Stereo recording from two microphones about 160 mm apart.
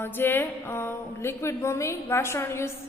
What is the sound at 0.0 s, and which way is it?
A woman's voice, 15° left (ahead or behind).